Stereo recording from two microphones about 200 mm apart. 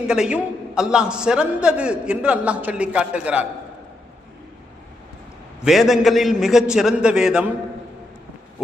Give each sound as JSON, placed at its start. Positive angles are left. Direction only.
{"t": 0.1, "sound": "a man's voice", "side_deg": -5}
{"t": 5.6, "sound": "a man's voice", "side_deg": 0}